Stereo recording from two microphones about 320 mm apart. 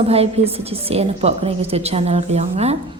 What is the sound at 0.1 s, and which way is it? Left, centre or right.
A woman's voice, centre.